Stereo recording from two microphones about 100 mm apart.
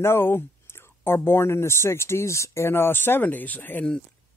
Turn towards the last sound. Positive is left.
turn(degrees=15)  # may be behind; listen again after turning